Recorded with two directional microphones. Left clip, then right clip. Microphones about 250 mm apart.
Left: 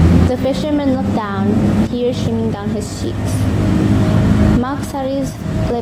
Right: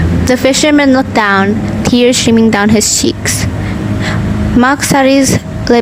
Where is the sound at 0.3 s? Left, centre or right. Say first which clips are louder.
Right 9 dB; right.